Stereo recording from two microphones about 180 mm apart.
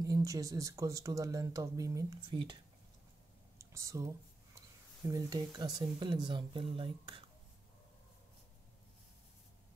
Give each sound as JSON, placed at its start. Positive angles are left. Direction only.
{"t": 0.0, "sound": "speech", "side_deg": -20}
{"t": 3.5, "sound": "a sound", "side_deg": -15}
{"t": 4.6, "sound": "speech", "side_deg": -20}